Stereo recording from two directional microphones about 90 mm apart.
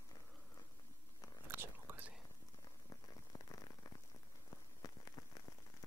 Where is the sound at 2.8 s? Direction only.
45° left (ahead or behind).